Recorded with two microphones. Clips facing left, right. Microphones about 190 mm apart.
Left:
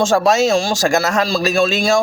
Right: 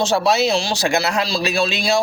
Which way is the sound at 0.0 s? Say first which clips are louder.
Left 3 dB; 45° left (ahead or behind).